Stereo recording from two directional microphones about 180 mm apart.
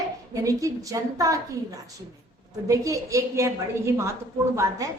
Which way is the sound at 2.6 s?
20° right (ahead or behind).